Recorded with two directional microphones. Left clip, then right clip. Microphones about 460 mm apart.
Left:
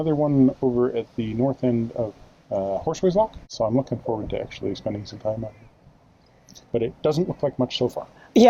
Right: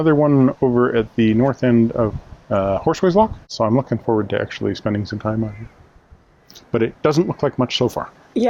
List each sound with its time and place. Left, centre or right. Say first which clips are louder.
0.0 s speech: right 6 dB; right
6.5 s speech: right 5 dB; right